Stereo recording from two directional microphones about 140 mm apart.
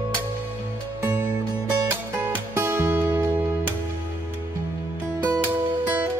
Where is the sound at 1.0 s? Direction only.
15° right (ahead or behind).